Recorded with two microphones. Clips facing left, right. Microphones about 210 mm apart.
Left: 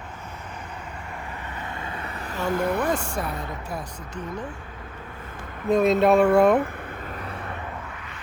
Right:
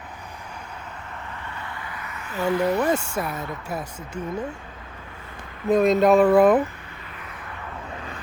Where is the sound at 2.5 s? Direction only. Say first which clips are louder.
Right 3 dB; 50° left (ahead or behind).